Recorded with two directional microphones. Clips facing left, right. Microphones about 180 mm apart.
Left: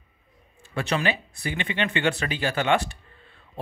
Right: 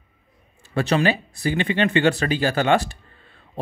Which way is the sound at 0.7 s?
35° right (ahead or behind).